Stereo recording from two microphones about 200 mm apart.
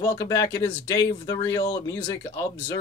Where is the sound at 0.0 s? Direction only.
15° left (ahead or behind).